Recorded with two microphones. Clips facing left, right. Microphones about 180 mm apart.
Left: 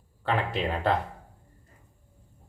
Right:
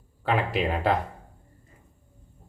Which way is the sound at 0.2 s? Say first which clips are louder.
Right 3 dB; 10° right (ahead or behind).